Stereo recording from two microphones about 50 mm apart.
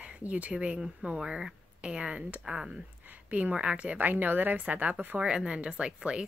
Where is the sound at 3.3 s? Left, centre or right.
Right.